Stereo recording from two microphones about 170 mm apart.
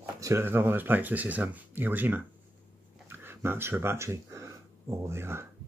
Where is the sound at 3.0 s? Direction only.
15° right (ahead or behind).